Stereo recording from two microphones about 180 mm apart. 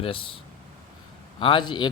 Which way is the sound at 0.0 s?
30° left (ahead or behind).